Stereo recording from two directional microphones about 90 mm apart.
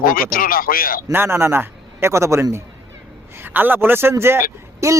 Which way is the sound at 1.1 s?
25° right (ahead or behind).